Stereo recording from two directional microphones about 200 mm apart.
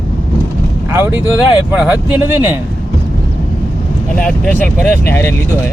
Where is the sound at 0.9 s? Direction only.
15° right (ahead or behind).